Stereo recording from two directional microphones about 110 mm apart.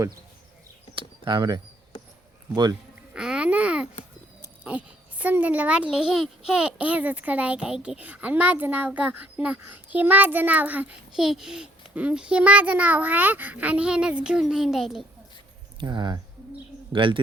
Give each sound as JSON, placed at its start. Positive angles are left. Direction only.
{"t": 0.9, "sound": "speech", "side_deg": -50}
{"t": 3.1, "sound": "babbling", "side_deg": -10}
{"t": 4.6, "sound": "a child's voice", "side_deg": -15}
{"t": 15.8, "sound": "speech", "side_deg": -45}